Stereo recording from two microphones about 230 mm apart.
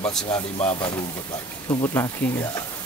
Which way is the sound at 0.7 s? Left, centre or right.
Centre.